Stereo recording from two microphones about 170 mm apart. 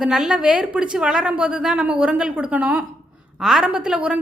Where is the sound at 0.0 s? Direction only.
5° right (ahead or behind).